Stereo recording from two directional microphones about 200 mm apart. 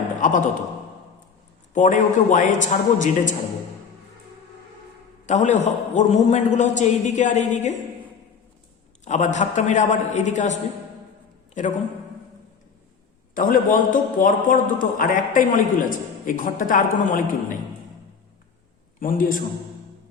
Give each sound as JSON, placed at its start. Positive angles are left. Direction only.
{"t": 0.2, "sound": "a man's voice", "side_deg": 40}
{"t": 1.7, "sound": "a man's voice", "side_deg": 40}
{"t": 5.2, "sound": "a man's voice", "side_deg": 35}
{"t": 9.0, "sound": "a man's voice", "side_deg": 35}
{"t": 13.3, "sound": "a man's voice", "side_deg": 45}
{"t": 18.9, "sound": "a man's voice", "side_deg": 45}